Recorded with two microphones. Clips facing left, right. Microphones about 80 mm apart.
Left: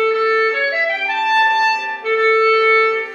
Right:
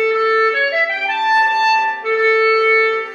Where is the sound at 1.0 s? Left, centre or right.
Centre.